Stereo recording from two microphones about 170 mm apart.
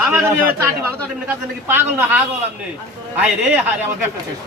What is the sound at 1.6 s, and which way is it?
Speech, 10° right (ahead or behind).